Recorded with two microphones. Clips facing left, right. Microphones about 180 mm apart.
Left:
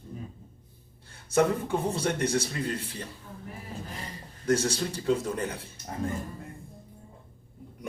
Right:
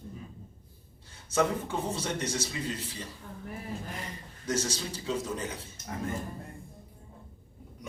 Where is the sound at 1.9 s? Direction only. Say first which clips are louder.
Left 5 dB; 60° left (ahead or behind).